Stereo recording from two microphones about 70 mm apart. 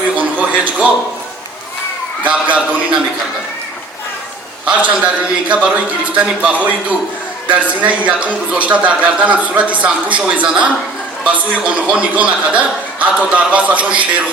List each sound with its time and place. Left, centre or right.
0.2 s television: right
2.2 s speech: centre
4.6 s speech: centre